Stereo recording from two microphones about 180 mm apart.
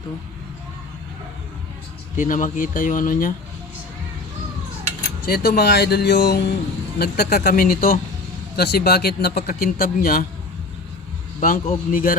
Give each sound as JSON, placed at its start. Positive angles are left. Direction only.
{"t": 2.1, "sound": "speech", "side_deg": 45}
{"t": 5.2, "sound": "speech", "side_deg": 60}
{"t": 11.3, "sound": "speech", "side_deg": 50}